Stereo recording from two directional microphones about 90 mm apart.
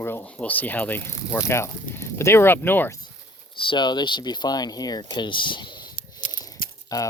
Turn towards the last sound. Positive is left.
turn(degrees=45)  # may be behind; listen again after turning